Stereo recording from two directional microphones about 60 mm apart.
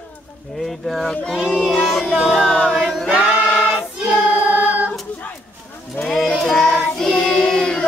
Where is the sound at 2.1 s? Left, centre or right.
Centre.